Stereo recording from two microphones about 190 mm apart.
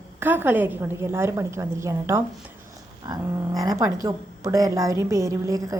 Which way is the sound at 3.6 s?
20° right (ahead or behind).